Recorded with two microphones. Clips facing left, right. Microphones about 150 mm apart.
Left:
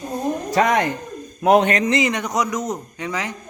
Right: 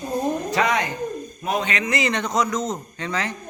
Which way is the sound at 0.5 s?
50° left (ahead or behind).